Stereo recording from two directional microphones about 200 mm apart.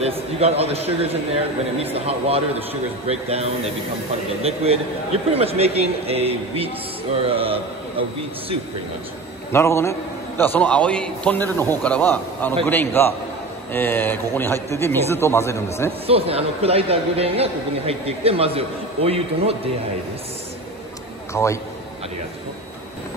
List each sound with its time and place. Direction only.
0.0 s a man's voice: 30° right (ahead or behind)
9.5 s a man's voice: 15° left (ahead or behind)
16.1 s speech: 30° right (ahead or behind)
21.3 s a man's voice: 15° left (ahead or behind)